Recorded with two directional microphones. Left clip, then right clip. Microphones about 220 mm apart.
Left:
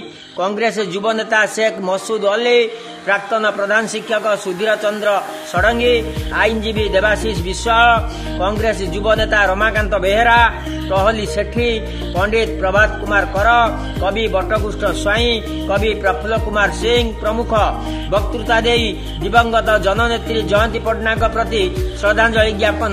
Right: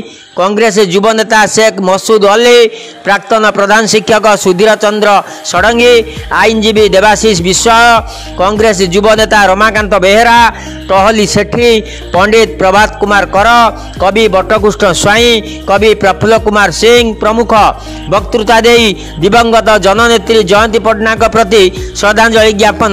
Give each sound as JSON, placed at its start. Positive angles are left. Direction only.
{"t": 0.4, "sound": "a man's voice", "side_deg": -45}